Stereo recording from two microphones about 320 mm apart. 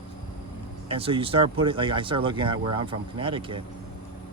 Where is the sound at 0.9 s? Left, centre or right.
Centre.